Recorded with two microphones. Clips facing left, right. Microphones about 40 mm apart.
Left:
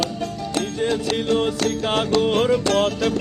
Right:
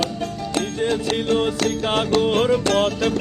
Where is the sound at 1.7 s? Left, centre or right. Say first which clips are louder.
Even; centre.